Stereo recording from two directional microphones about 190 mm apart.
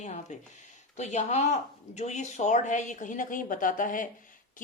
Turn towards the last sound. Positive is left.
turn(degrees=45)  # may be behind; listen again after turning